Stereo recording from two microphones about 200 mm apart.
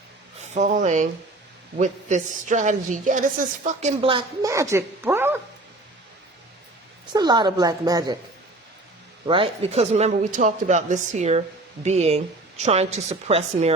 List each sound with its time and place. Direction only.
0.5 s a man's voice: 35° right (ahead or behind)
4.4 s a woman's voice: 15° right (ahead or behind)
7.1 s a woman's voice: 20° right (ahead or behind)
9.2 s a man's voice: 25° right (ahead or behind)